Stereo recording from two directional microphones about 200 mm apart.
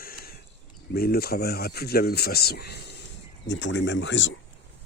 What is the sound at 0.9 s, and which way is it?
Speech, 50° left (ahead or behind).